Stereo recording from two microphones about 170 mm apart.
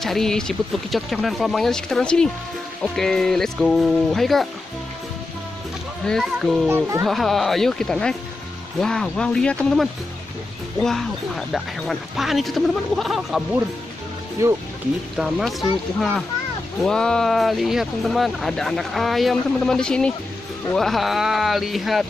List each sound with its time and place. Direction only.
0.0 s speech: centre (ahead or behind)
6.0 s speech: centre (ahead or behind)
6.7 s a child's voice: 15° right (ahead or behind)
7.1 s speech: centre (ahead or behind)
14.4 s a child's voice: 15° right (ahead or behind)
15.1 s speech: 5° right (ahead or behind)